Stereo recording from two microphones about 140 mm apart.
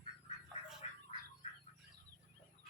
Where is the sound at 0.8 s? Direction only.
45° left (ahead or behind).